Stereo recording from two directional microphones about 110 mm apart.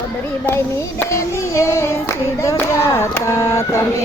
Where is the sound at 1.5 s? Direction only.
25° left (ahead or behind).